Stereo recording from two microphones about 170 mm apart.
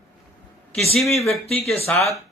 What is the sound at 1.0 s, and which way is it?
Speech, centre (ahead or behind).